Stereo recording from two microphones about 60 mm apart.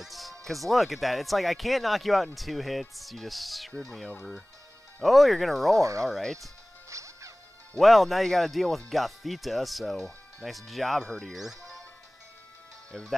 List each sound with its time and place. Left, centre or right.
0.0 s speech: centre
5.0 s speech: centre
5.8 s speech: right
6.9 s music: right
7.8 s speech: centre
11.1 s speech: centre
11.3 s speech: centre
12.9 s speech: centre